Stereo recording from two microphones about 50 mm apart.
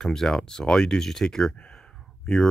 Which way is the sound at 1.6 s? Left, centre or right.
Centre.